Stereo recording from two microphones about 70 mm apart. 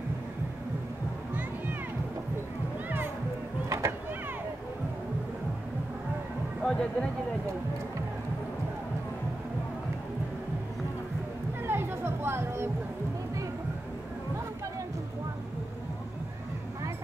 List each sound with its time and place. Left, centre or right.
3.6 s a sound: right
6.6 s music: centre
11.6 s music: right